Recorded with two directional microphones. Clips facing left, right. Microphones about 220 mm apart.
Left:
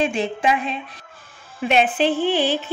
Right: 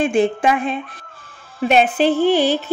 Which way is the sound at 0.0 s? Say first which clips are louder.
Right 5 dB; 50° right (ahead or behind).